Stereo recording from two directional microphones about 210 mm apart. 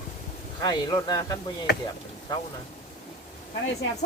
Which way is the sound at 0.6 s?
20° left (ahead or behind).